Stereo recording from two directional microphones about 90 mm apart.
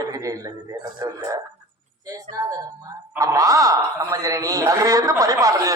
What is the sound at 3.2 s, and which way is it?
A man's voice, 40° right (ahead or behind).